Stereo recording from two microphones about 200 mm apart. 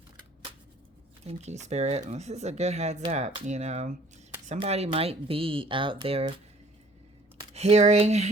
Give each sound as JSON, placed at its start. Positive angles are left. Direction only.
{"t": 1.2, "sound": "speech", "side_deg": -35}
{"t": 7.5, "sound": "speech", "side_deg": -30}